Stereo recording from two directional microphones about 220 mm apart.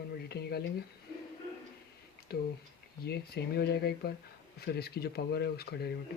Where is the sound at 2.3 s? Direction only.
45° left (ahead or behind).